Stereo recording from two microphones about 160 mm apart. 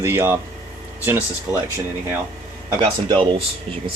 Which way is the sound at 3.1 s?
30° right (ahead or behind).